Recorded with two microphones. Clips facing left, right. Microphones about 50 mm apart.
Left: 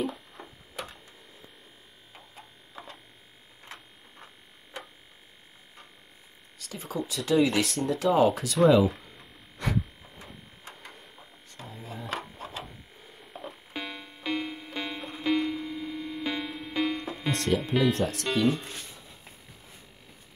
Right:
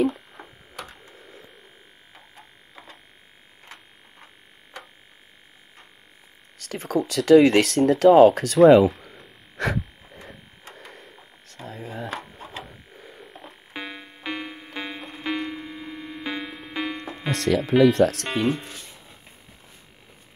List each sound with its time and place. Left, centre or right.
6.6 s speech: right
7.0 s speech: right
8.5 s speech: right
9.6 s a sound: right
11.6 s a sound: right
12.2 s a sound: centre
13.3 s music: centre
13.7 s music: centre
17.3 s insect: right
17.8 s speech: right
18.3 s speech: right